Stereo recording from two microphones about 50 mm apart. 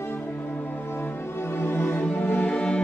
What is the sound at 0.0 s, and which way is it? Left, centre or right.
Music, left.